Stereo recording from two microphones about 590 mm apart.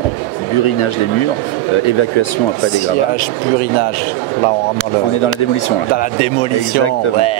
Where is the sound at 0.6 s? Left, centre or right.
Left.